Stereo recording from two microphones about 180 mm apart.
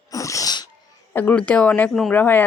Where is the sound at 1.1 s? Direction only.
10° left (ahead or behind).